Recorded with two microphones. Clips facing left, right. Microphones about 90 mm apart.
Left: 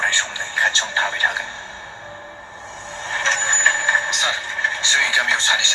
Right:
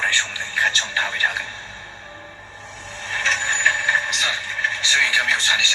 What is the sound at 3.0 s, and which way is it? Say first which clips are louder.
Vehicle: left 2 dB; 25° left (ahead or behind).